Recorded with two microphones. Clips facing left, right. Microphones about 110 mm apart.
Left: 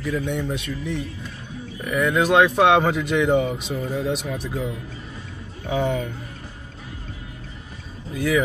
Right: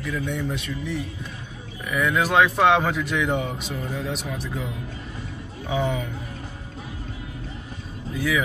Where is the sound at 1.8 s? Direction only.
5° left (ahead or behind).